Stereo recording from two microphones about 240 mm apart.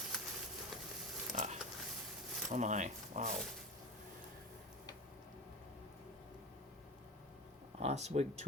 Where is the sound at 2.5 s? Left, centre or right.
Right.